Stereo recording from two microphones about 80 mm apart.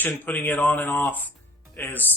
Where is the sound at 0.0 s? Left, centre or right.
Left.